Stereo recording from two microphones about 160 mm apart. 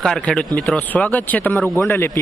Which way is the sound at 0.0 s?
5° left (ahead or behind).